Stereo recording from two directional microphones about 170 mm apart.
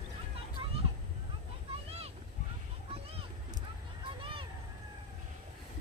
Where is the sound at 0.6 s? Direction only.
35° right (ahead or behind).